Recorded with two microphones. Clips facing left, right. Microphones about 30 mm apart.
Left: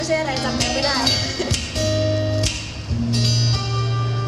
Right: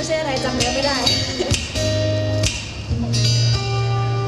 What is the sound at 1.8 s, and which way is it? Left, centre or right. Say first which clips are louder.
Music: left 1 dB; right.